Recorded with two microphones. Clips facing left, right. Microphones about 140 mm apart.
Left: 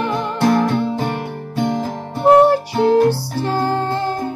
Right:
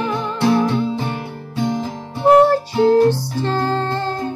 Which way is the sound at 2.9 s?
10° left (ahead or behind).